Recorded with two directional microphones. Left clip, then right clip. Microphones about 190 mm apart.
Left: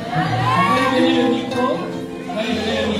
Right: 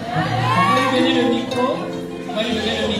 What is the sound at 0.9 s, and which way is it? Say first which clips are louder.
Speech: left 1 dB; 40° right (ahead or behind).